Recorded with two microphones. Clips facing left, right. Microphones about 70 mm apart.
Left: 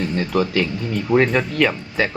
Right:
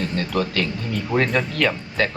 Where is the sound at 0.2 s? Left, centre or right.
Centre.